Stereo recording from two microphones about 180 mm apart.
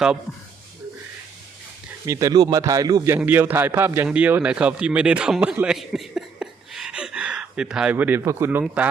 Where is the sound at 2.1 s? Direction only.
15° right (ahead or behind).